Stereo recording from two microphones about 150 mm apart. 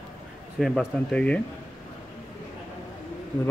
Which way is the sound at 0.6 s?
5° left (ahead or behind).